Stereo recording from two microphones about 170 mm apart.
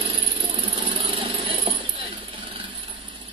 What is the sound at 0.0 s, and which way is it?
Vehicle, 35° right (ahead or behind).